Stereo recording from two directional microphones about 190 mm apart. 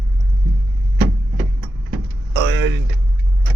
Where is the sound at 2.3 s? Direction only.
80° right.